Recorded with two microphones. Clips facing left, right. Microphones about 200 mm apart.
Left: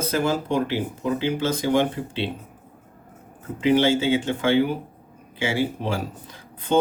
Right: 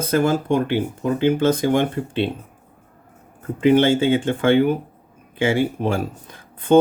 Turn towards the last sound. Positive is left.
turn(degrees=-50)  # may be behind; listen again after turning